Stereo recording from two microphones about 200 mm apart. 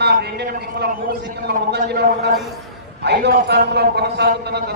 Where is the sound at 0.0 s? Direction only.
55° right (ahead or behind).